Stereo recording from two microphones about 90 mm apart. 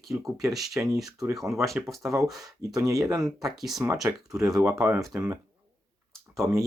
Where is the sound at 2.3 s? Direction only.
40° right (ahead or behind).